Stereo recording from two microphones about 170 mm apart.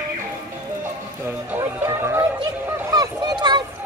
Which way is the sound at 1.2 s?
15° right (ahead or behind).